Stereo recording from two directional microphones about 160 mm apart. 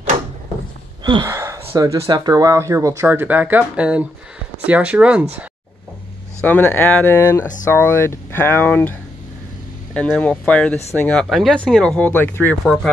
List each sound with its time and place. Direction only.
1.0 s a sound: 25° right (ahead or behind)
2.0 s speech: 25° right (ahead or behind); by 5.2 s 10° right (ahead or behind)
6.4 s speech: 10° left (ahead or behind)
9.9 s speech: 5° left (ahead or behind)